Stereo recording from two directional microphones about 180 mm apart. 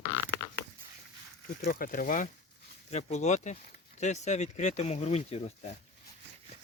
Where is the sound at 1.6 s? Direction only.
50° left (ahead or behind); by 5.8 s 35° left (ahead or behind).